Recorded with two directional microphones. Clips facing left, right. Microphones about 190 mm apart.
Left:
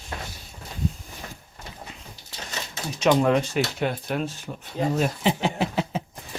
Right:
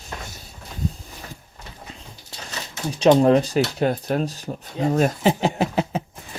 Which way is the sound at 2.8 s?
30° right (ahead or behind).